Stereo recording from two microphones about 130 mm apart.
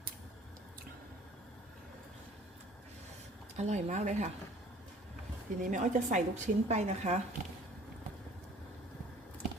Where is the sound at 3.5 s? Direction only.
65° right (ahead or behind).